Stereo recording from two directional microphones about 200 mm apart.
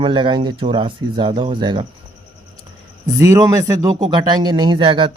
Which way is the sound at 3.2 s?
15° right (ahead or behind).